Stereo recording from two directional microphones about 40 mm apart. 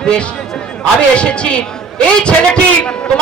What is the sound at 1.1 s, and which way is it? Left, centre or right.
A man's voice, left.